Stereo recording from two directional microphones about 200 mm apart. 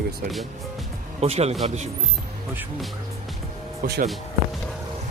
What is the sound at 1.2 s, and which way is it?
Speech, 30° right (ahead or behind).